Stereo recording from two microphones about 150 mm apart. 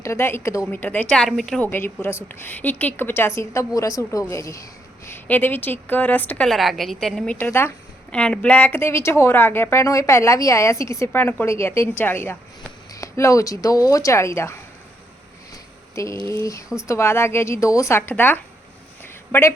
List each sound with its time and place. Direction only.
0.0 s speech: 15° left (ahead or behind); by 7.3 s centre (ahead or behind)
7.3 s speech: 15° left (ahead or behind)
16.1 s a woman's voice: 15° left (ahead or behind)